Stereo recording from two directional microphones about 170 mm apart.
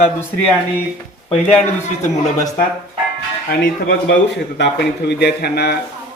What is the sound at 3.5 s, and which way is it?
Speech, 90° left.